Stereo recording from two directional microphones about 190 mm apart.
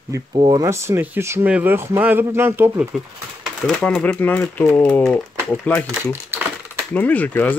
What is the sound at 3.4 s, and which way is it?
Speech, 5° left (ahead or behind).